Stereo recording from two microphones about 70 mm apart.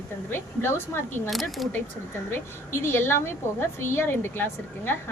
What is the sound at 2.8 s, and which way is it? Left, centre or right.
A woman's voice, left.